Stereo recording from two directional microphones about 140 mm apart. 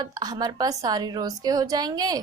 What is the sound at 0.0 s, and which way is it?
A woman's voice, 30° right (ahead or behind).